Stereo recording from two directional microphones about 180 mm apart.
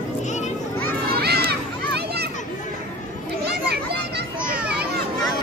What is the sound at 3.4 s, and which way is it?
Children playing, 65° right (ahead or behind).